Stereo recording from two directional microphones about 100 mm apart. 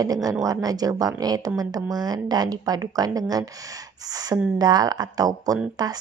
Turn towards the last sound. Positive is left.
turn(degrees=-40)  # may be behind; listen again after turning